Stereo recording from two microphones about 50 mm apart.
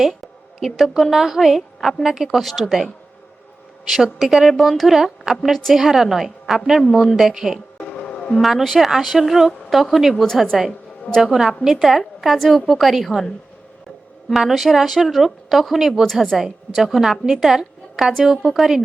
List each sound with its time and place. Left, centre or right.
0.6 s a woman's voice: centre
7.8 s music: left
8.4 s a woman's voice: centre
14.3 s a woman's voice: centre